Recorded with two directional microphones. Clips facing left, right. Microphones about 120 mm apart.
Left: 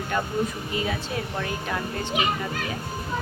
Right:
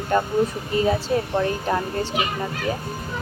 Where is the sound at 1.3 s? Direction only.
30° right (ahead or behind).